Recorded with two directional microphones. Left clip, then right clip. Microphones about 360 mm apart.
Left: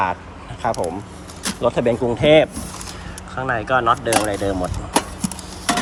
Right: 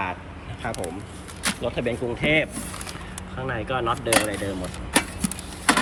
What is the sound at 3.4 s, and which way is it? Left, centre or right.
Speech, centre.